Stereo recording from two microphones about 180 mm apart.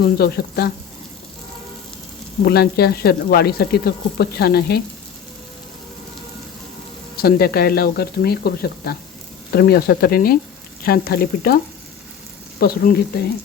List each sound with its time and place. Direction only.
0.0 s speech: 60° left (ahead or behind)
2.4 s speech: 60° left (ahead or behind)
7.2 s speech: 60° left (ahead or behind)